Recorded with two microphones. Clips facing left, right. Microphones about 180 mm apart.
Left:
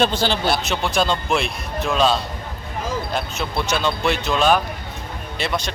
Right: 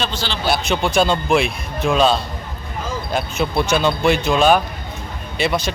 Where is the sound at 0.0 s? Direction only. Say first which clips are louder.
Left 6 dB; 55° left (ahead or behind).